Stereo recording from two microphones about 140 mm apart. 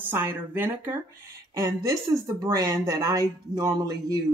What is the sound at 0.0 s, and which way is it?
Speech, 15° right (ahead or behind).